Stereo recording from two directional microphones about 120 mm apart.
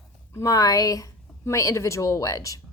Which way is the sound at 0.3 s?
30° left (ahead or behind).